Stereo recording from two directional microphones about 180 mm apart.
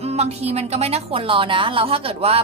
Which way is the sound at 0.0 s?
35° right (ahead or behind).